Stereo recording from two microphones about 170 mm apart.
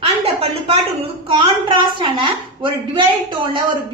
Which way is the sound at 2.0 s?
30° right (ahead or behind).